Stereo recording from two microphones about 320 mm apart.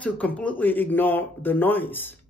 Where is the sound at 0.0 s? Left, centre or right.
Centre.